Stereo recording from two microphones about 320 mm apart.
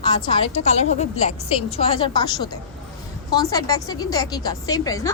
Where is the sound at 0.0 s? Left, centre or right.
Centre.